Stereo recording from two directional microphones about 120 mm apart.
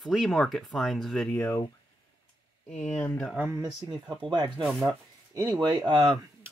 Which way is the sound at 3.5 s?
35° right (ahead or behind).